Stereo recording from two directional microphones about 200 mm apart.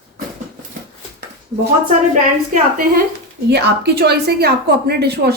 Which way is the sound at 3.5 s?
55° right (ahead or behind).